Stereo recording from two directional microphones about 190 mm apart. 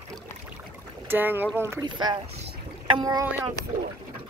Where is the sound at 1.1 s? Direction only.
10° right (ahead or behind).